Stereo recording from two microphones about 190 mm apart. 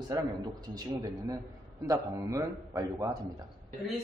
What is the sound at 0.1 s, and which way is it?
A man's voice, 20° right (ahead or behind).